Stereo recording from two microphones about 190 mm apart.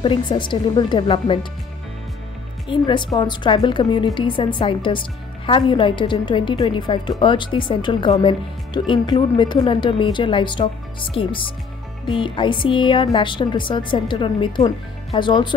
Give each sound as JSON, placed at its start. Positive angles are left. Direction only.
{"t": 0.0, "sound": "a woman's voice", "side_deg": 25}
{"t": 2.7, "sound": "a woman's voice", "side_deg": 25}